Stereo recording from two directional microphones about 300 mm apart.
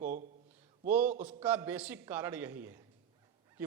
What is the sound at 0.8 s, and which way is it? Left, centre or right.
A man's voice, centre.